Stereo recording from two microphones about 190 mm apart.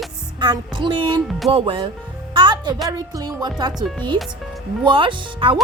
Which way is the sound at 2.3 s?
25° right (ahead or behind).